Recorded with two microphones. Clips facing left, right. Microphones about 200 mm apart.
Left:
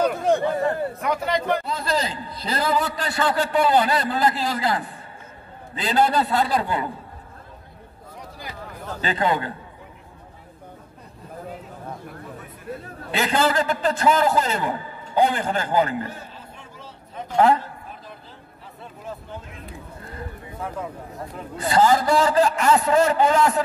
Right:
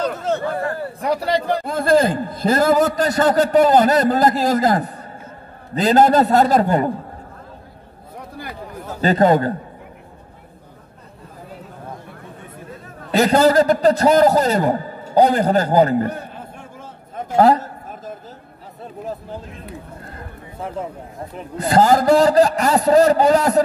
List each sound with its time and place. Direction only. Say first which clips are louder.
0.0 s a sound: left 1 dB; 10° left (ahead or behind)
0.9 s a man's voice: right 4 dB; 35° right (ahead or behind)
1.6 s a man's voice: right 10 dB; 50° right (ahead or behind)
9.0 s a man's voice: right 9 dB; 40° right (ahead or behind)
13.1 s a man's voice: right 8 dB; 40° right (ahead or behind)
16.1 s a sound: right 9 dB; 55° right (ahead or behind)
21.5 s a man's voice: right 4 dB; 40° right (ahead or behind)